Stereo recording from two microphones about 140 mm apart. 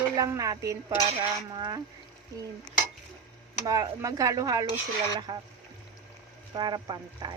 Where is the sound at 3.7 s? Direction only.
25° right (ahead or behind).